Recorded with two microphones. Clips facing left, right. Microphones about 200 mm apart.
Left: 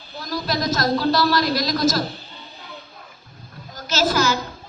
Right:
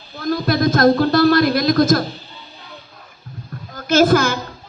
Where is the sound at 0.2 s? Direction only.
55° right (ahead or behind).